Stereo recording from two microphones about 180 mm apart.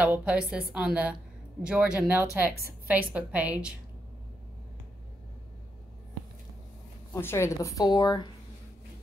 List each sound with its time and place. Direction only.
0.0 s a woman's voice: 5° right (ahead or behind)
7.1 s a woman's voice: 15° left (ahead or behind)